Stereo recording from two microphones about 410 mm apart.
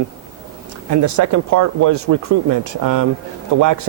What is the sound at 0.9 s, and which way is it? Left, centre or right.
Speech, right.